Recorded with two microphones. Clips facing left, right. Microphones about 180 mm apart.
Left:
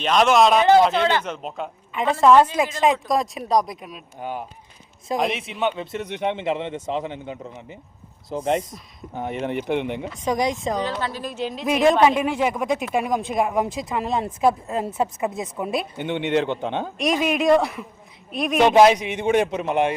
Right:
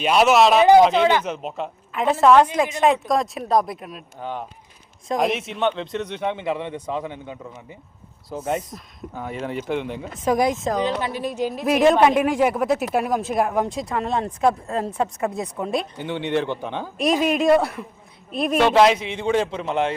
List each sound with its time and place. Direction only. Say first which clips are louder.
0.0 s speech: right 1 dB; 10° right (ahead or behind)
4.2 s speech: even; 10° left (ahead or behind)
9.1 s a man's voice: left 3 dB; 20° left (ahead or behind)
10.2 s speech: right 3 dB; 5° right (ahead or behind)
11.0 s speech: right 3 dB; 15° right (ahead or behind); by 15.9 s 5° left (ahead or behind)
16.0 s a man's voice: left 2 dB; 20° left (ahead or behind)
17.0 s speech: right 2 dB; centre (ahead or behind)
18.6 s speech: left 2 dB; 15° left (ahead or behind)